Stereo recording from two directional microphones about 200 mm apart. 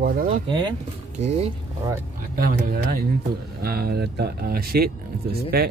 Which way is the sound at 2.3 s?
50° right (ahead or behind).